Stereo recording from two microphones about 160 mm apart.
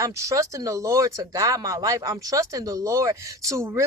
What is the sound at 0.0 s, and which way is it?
Speech, 20° right (ahead or behind).